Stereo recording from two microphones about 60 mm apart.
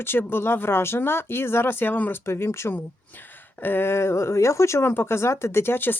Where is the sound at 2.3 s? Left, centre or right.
Left.